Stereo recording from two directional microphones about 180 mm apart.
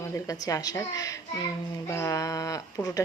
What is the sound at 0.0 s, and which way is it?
A woman's voice, 15° left (ahead or behind).